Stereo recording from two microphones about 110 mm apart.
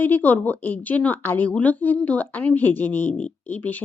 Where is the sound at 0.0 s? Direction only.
15° left (ahead or behind).